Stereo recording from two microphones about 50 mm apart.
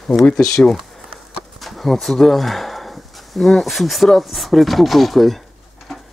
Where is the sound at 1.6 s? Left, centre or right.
Centre.